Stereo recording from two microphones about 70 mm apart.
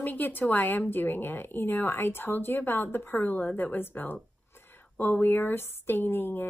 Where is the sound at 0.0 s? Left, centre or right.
Left.